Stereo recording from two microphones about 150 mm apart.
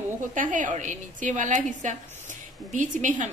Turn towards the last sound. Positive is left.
turn(degrees=-55)  # may be behind; listen again after turning